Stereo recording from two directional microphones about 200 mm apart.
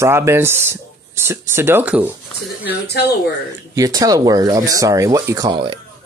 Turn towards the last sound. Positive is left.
turn(degrees=-25)  # may be behind; listen again after turning